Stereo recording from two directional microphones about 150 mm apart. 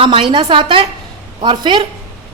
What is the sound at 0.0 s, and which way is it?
A woman's voice, 35° right (ahead or behind).